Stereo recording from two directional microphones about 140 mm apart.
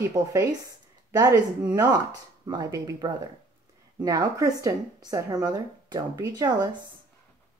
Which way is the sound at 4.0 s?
25° right (ahead or behind).